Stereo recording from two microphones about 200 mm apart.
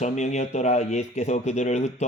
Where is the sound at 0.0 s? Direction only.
35° left (ahead or behind).